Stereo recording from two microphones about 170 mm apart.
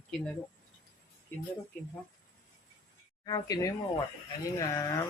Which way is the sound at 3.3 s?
20° left (ahead or behind).